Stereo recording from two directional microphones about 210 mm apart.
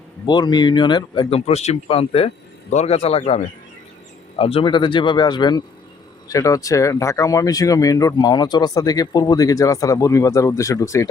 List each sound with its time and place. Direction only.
0.3 s speech: 20° left (ahead or behind)